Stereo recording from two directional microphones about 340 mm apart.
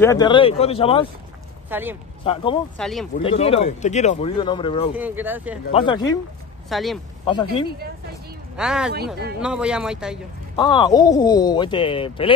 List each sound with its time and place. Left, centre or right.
0.0 s speech: centre
1.7 s speech: centre
2.2 s speech: centre
2.8 s speech: centre
3.2 s speech: centre
4.9 s speech: centre
5.7 s speech: centre
6.7 s speech: centre
7.2 s speech: centre
8.5 s speech: centre
8.9 s a woman's voice: right
9.4 s speech: centre
10.5 s speech: centre